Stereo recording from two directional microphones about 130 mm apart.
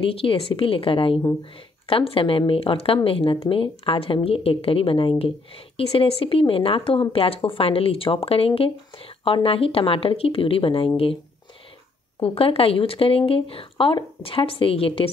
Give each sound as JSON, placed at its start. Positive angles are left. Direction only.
{"t": 0.0, "sound": "a woman's voice", "side_deg": 45}
{"t": 12.2, "sound": "a woman's voice", "side_deg": 45}